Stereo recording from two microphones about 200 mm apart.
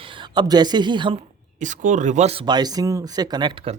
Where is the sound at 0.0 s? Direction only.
25° right (ahead or behind).